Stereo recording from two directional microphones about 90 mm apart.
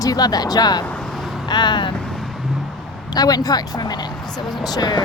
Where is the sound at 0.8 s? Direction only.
15° left (ahead or behind).